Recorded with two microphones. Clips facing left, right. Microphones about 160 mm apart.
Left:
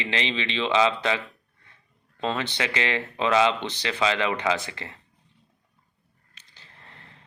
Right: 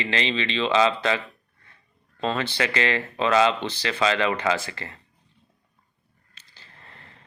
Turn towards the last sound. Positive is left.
turn(degrees=15)  # may be behind; listen again after turning